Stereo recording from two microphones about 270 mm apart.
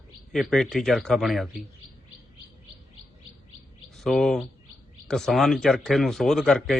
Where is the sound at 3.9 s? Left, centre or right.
Centre.